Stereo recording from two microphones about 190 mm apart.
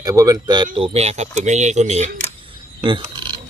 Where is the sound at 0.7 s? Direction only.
30° right (ahead or behind).